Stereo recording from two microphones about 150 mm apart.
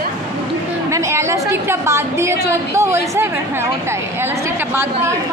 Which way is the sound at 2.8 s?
15° right (ahead or behind).